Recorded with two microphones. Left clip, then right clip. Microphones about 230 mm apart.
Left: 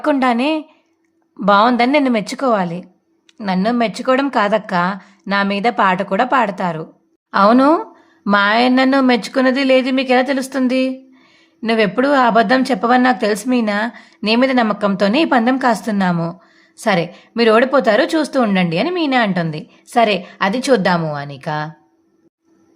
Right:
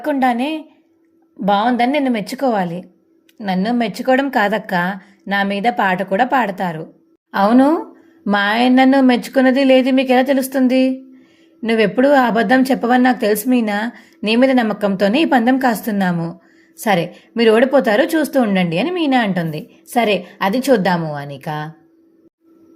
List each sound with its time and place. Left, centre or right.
0.0 s a woman's voice: centre
12.1 s a woman's voice: centre